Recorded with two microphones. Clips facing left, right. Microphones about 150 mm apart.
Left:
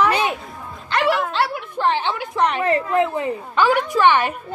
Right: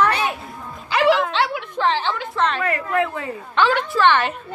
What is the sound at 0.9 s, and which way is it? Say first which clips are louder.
A woman's voice: right 3 dB; centre (ahead or behind).